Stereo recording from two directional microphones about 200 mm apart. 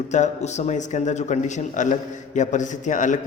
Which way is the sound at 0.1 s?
35° left (ahead or behind).